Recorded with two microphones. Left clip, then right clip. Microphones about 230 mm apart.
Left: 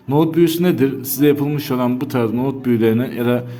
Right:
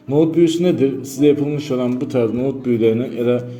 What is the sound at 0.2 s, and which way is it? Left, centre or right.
A man's voice, left.